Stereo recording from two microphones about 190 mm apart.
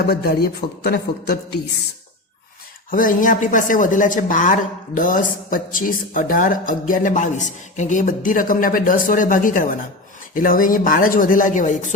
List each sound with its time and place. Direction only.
0.0 s a man's voice: 55° left (ahead or behind)
2.9 s speech: 45° left (ahead or behind)